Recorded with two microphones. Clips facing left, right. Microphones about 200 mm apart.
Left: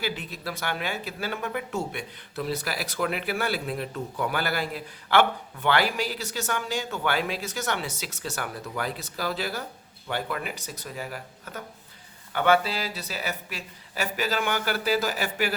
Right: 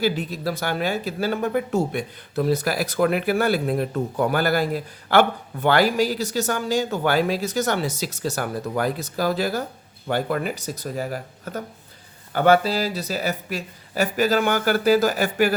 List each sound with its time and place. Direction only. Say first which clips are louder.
0.0 s speech: right 9 dB; 40° right (ahead or behind)